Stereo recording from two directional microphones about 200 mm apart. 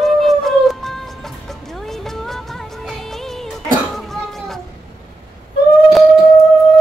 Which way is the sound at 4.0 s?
Centre (ahead or behind).